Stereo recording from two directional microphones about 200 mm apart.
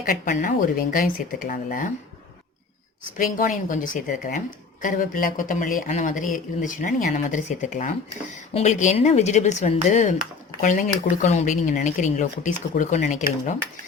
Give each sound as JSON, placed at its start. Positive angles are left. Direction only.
{"t": 0.0, "sound": "speech", "side_deg": 40}
{"t": 3.2, "sound": "a woman's voice", "side_deg": 45}